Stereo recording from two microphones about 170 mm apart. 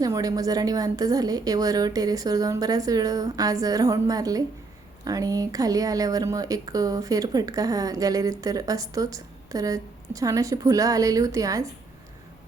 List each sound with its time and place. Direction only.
0.0 s speech: 20° right (ahead or behind)